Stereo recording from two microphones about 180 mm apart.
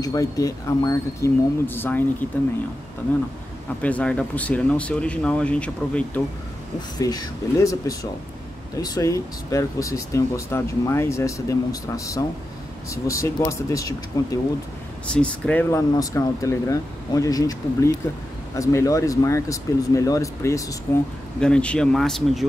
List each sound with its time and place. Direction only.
0.0 s speech: 20° left (ahead or behind)
3.8 s speech: 5° left (ahead or behind)
7.0 s speech: 20° left (ahead or behind)
15.0 s speech: 5° left (ahead or behind)